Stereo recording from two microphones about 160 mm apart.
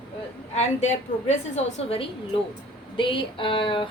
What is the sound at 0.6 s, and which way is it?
A woman's voice, 45° left (ahead or behind).